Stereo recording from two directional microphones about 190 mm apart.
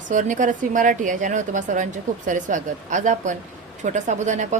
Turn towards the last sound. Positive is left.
turn(degrees=-40)  # may be behind; listen again after turning